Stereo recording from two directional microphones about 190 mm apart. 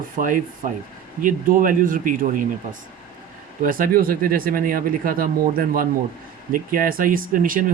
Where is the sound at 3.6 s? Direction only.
45° right (ahead or behind).